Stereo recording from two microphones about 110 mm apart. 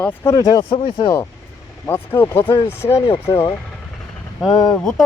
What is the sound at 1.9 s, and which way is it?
Speech, 20° left (ahead or behind).